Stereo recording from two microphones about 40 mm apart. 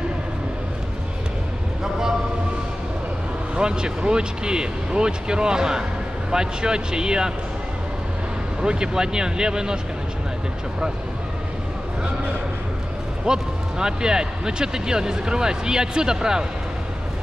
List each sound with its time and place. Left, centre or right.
3.5 s speech: right
8.5 s speech: right
13.2 s speech: centre